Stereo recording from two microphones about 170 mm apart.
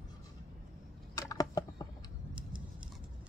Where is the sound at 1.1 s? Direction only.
20° left (ahead or behind).